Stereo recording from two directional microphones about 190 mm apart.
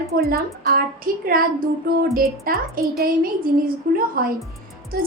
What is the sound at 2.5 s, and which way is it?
A woman's voice, 50° right (ahead or behind).